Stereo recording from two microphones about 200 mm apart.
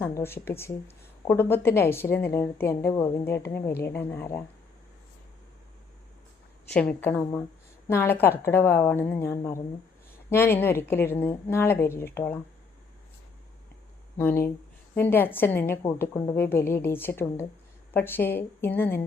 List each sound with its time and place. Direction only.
0.0 s a woman's voice: 10° left (ahead or behind)
6.7 s a woman's voice: 5° left (ahead or behind)
14.2 s a woman's voice: 10° left (ahead or behind)